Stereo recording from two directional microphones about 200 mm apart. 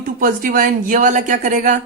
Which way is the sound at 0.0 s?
45° right (ahead or behind).